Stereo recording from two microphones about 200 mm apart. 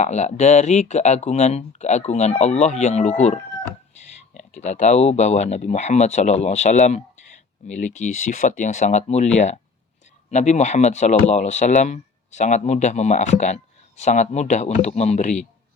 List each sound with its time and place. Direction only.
0.0 s speech: 35° left (ahead or behind)
10.3 s speech: 35° left (ahead or behind)